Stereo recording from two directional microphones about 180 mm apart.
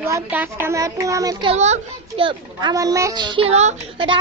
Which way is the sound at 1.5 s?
35° right (ahead or behind).